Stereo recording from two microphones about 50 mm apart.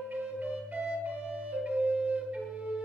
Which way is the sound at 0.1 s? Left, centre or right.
Right.